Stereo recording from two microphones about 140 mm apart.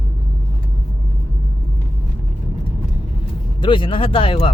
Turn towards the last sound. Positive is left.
turn(degrees=40)  # may be behind; listen again after turning